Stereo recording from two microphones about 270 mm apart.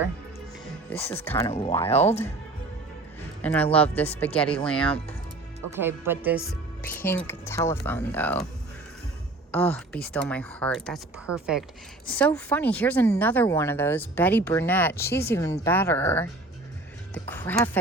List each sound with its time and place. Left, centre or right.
0.9 s speech: centre
1.5 s speech: left
3.4 s speech: centre
5.8 s speech: centre
9.5 s speech: centre